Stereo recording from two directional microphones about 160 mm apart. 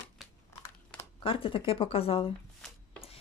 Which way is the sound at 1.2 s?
35° left (ahead or behind).